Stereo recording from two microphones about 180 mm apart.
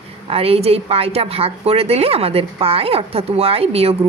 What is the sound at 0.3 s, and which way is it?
A woman's voice, 35° right (ahead or behind).